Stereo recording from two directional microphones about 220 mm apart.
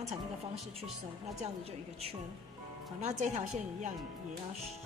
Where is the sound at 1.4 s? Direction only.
25° right (ahead or behind).